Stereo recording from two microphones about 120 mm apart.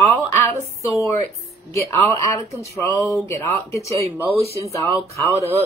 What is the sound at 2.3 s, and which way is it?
Speech, 25° left (ahead or behind).